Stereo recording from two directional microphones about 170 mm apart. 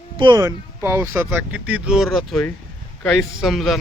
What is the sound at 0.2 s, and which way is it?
Speech, 25° right (ahead or behind).